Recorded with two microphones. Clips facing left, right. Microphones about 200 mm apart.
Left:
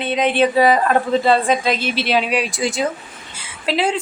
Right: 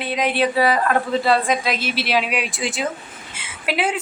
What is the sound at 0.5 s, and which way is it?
A man's voice, 25° left (ahead or behind).